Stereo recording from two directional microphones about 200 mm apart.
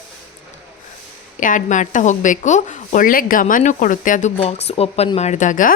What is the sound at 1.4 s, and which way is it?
A woman's voice, 40° left (ahead or behind).